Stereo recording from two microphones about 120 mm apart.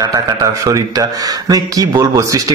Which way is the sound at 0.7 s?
30° right (ahead or behind).